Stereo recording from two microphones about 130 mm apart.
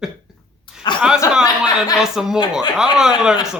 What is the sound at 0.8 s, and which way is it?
Chuckle, 35° left (ahead or behind).